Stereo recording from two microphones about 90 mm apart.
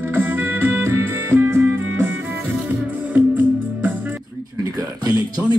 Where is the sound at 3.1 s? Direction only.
20° right (ahead or behind).